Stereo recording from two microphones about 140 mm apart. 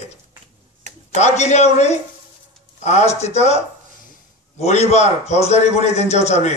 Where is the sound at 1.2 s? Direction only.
55° left (ahead or behind).